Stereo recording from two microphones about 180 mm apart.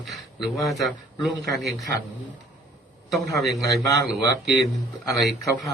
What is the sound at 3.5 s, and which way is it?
Speech, 20° left (ahead or behind).